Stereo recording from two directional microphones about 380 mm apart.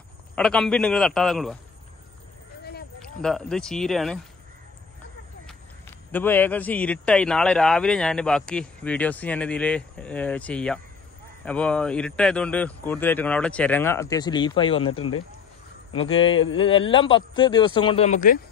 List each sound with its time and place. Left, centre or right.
0.4 s a man's voice: centre
2.6 s a sound: left
3.2 s a man's voice: centre
5.5 s a man's voice: centre